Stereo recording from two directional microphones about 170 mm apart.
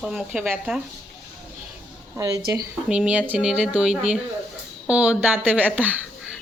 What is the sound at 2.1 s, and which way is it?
Speech, 20° right (ahead or behind).